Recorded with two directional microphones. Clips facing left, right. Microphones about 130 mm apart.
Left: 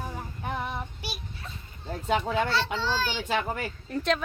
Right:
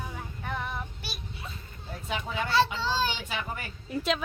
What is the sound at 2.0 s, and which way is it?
Speech, 40° left (ahead or behind).